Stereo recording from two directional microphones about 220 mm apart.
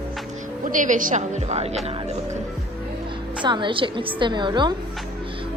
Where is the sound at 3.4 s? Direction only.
20° right (ahead or behind).